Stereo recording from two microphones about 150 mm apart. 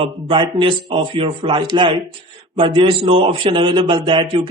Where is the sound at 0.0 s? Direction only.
35° right (ahead or behind).